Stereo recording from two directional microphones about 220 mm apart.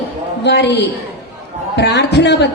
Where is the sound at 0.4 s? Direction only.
50° left (ahead or behind).